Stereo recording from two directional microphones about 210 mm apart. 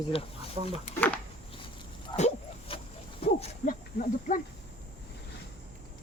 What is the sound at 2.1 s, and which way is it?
Dog, 30° left (ahead or behind).